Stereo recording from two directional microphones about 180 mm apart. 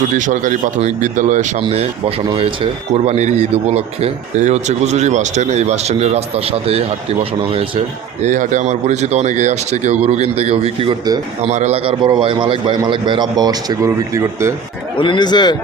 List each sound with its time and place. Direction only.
0.2 s speech: 45° right (ahead or behind)
1.6 s a man's voice: 35° right (ahead or behind)
8.2 s a man's voice: 45° right (ahead or behind); by 11.5 s 25° right (ahead or behind)
11.5 s a man's voice: 35° right (ahead or behind); by 14.5 s 15° right (ahead or behind)
14.9 s speech: 25° left (ahead or behind)